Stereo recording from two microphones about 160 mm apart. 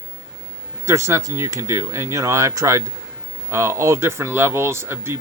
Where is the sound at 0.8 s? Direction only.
15° right (ahead or behind).